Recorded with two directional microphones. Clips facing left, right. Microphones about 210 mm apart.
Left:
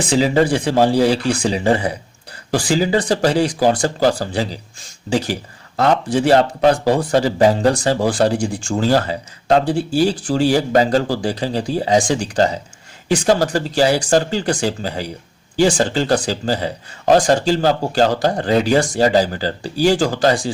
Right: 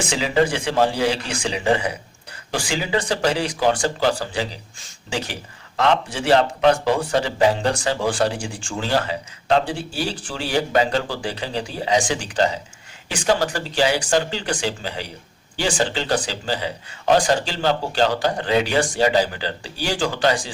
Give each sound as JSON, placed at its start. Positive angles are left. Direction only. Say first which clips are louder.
{"t": 0.1, "sound": "speech", "louder": "left 6 dB", "side_deg": 35}
{"t": 5.7, "sound": "speech", "louder": "left 4 dB", "side_deg": 40}